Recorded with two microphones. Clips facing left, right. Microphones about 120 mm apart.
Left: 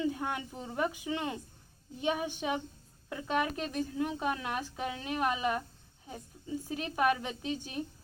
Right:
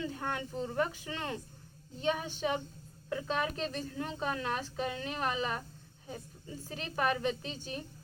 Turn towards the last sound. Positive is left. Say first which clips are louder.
# left 3 dB
turn(degrees=15)  # may be behind; listen again after turning